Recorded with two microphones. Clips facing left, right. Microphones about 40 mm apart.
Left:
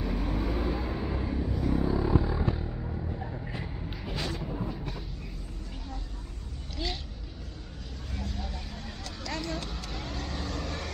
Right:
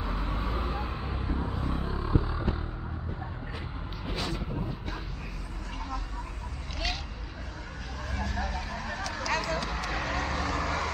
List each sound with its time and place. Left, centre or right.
0.0 s vehicle: right
1.4 s vehicle: right
2.0 s a sound: centre
8.1 s vehicle: right
10.4 s vehicle: right